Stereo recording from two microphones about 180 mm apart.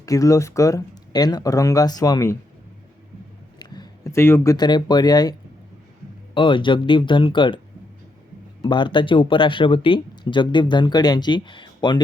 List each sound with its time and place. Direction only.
0.0 s speech: 20° left (ahead or behind)
3.6 s speech: 25° left (ahead or behind)
8.6 s speech: 25° left (ahead or behind)